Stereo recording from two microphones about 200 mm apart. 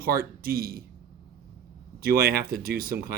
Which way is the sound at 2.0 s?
45° right (ahead or behind).